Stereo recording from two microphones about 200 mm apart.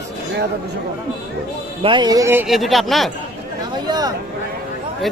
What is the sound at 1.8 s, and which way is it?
Speech, 25° right (ahead or behind).